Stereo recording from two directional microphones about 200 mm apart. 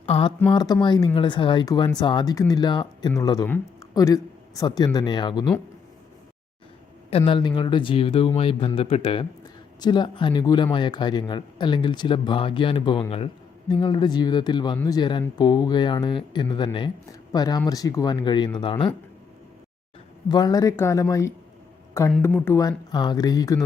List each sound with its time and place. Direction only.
0.0 s speech: 25° left (ahead or behind)
7.1 s speech: 25° left (ahead or behind)
20.2 s speech: 20° left (ahead or behind)
22.4 s speech: 15° left (ahead or behind)